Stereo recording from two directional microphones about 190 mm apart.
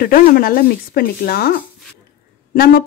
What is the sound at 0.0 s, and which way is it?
Speech, 50° left (ahead or behind).